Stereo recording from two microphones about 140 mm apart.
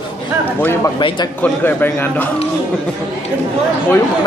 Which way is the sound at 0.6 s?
15° left (ahead or behind).